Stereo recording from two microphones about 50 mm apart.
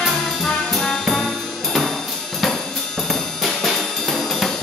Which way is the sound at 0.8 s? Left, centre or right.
Centre.